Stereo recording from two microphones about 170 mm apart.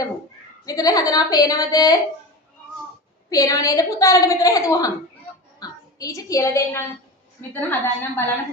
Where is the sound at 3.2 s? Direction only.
20° left (ahead or behind).